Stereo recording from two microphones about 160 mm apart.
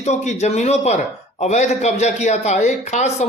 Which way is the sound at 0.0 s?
45° left (ahead or behind).